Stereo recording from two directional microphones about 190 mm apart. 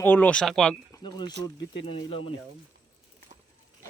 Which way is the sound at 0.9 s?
20° left (ahead or behind).